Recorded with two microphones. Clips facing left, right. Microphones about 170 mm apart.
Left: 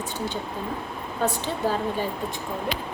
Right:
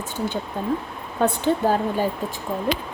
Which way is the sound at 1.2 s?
45° right (ahead or behind).